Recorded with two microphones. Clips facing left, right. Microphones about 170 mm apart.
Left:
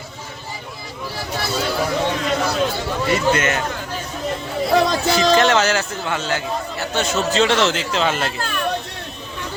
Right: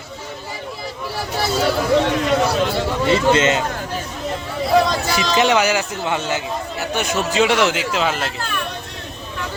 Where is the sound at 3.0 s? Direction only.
25° right (ahead or behind).